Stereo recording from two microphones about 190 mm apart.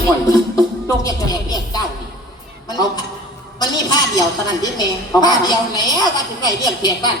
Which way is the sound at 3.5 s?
20° left (ahead or behind).